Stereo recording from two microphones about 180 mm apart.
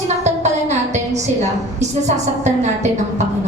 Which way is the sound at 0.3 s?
40° right (ahead or behind).